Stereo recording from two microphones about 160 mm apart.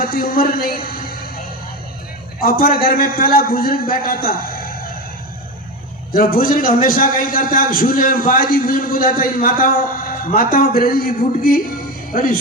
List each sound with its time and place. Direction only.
0.0 s a man's voice: 70° left (ahead or behind)
2.4 s a man's voice: 65° left (ahead or behind)
6.1 s a man's voice: 60° left (ahead or behind)